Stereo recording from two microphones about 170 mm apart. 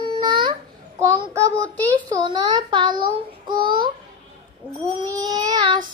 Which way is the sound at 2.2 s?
25° right (ahead or behind).